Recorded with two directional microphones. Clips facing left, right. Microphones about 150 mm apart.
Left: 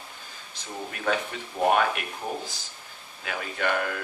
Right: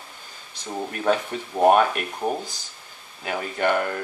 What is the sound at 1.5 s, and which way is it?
Speech, 40° right (ahead or behind).